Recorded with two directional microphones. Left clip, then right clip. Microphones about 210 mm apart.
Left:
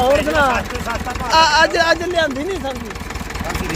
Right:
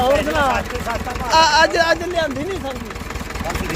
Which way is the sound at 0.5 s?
45° left (ahead or behind).